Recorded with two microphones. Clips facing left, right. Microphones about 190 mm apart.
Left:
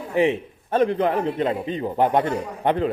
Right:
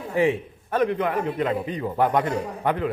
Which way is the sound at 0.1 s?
20° left (ahead or behind).